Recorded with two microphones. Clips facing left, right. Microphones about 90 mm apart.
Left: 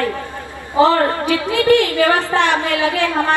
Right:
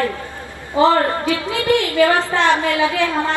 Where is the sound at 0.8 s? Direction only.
20° right (ahead or behind).